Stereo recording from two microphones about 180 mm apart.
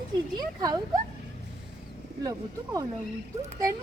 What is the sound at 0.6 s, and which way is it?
Speech, 20° right (ahead or behind).